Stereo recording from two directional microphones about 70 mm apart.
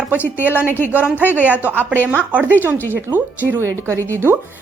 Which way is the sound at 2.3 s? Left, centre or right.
Right.